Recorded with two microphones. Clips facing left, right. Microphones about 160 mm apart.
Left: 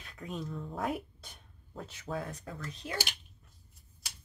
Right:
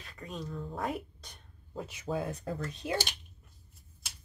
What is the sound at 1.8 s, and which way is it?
Speech, 10° right (ahead or behind).